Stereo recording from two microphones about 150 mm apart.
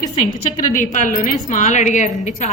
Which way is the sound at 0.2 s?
60° left (ahead or behind).